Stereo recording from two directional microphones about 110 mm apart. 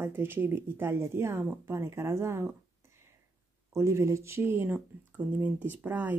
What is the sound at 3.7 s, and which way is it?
Speech, 25° right (ahead or behind).